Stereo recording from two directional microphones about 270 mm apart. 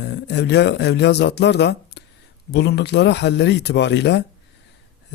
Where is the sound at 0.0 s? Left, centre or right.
Left.